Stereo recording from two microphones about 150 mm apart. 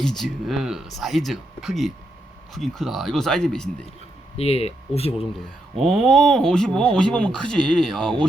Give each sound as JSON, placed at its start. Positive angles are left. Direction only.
{"t": 0.0, "sound": "speech", "side_deg": 0}
{"t": 4.4, "sound": "speech", "side_deg": 40}
{"t": 5.7, "sound": "speech", "side_deg": 0}